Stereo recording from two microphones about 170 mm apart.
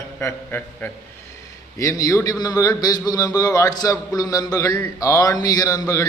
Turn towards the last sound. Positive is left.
turn(degrees=20)  # may be behind; listen again after turning